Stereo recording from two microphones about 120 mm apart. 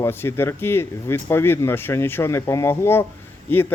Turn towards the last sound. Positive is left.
turn(degrees=15)  # may be behind; listen again after turning